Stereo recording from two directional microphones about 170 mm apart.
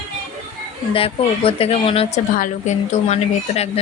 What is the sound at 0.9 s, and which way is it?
Speech, 35° left (ahead or behind).